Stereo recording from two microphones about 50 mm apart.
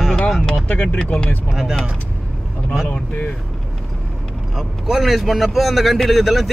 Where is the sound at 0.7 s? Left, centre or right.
Left.